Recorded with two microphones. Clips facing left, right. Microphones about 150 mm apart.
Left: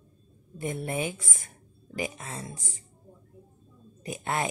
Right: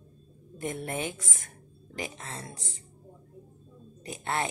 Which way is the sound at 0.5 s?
5° left (ahead or behind).